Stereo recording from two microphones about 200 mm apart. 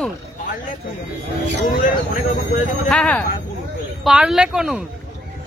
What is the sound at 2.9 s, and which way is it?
Speech, 5° left (ahead or behind).